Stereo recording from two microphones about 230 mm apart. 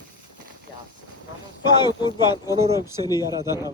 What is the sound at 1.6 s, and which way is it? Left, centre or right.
Speech, centre.